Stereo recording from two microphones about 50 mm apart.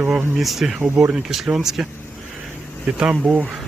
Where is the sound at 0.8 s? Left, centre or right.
Right.